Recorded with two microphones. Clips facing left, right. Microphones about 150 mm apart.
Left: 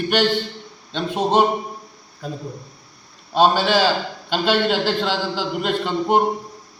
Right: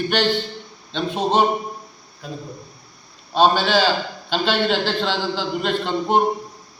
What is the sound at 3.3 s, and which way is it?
A man's voice, 10° left (ahead or behind).